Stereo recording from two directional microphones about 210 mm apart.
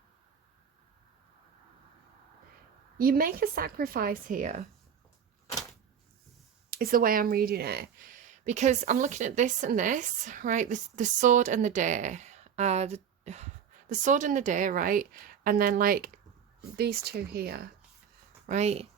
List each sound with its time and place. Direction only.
3.0 s a woman's voice: 45° right (ahead or behind)
6.7 s a woman's voice: 45° right (ahead or behind)
8.3 s a woman's voice: 35° right (ahead or behind)
18.4 s a woman's voice: 30° right (ahead or behind)